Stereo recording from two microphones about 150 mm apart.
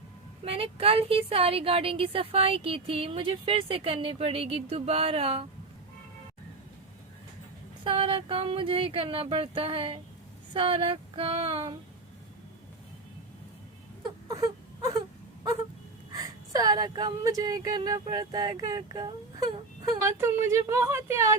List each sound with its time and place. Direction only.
0.4 s a woman's voice: 40° right (ahead or behind)
7.9 s a woman's voice: 35° right (ahead or behind)
14.4 s wail: 25° right (ahead or behind)
16.1 s speech: 25° right (ahead or behind)